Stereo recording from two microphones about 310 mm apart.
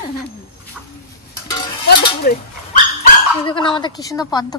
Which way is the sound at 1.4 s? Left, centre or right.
Centre.